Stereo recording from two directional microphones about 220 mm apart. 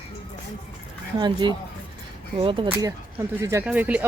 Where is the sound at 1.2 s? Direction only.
20° right (ahead or behind).